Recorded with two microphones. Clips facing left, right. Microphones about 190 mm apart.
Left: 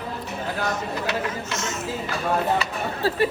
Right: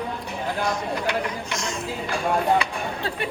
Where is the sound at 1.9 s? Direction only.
10° right (ahead or behind).